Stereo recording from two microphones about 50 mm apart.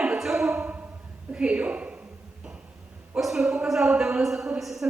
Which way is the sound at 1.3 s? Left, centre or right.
Right.